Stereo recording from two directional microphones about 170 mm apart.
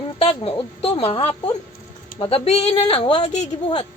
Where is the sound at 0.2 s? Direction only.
35° left (ahead or behind).